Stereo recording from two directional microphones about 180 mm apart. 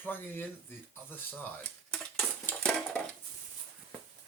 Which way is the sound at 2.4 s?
5° left (ahead or behind).